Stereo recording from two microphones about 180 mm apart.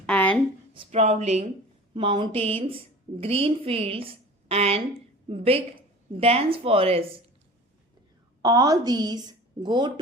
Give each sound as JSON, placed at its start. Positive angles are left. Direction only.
{"t": 0.0, "sound": "a sound", "side_deg": 5}
{"t": 0.7, "sound": "a woman's voice", "side_deg": -40}
{"t": 8.4, "sound": "a woman's voice", "side_deg": -20}